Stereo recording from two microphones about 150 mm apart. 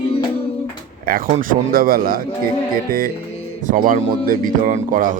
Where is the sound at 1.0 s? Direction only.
70° right (ahead or behind).